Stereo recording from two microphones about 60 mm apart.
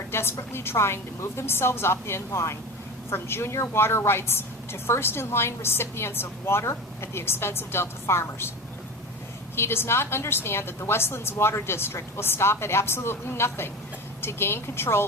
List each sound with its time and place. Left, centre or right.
0.1 s a woman's voice: left
9.6 s a woman's voice: left